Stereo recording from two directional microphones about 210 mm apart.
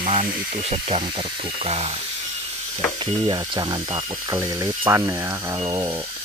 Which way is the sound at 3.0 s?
20° right (ahead or behind).